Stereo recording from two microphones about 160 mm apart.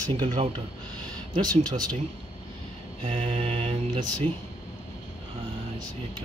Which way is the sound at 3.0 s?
35° right (ahead or behind).